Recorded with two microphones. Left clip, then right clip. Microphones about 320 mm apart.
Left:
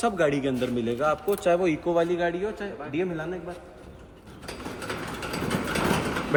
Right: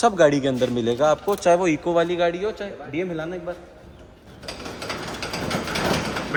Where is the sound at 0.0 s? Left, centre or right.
Centre.